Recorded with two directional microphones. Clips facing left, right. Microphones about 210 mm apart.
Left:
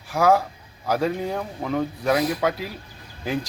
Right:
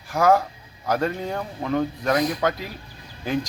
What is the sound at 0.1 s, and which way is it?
Speech, 5° left (ahead or behind).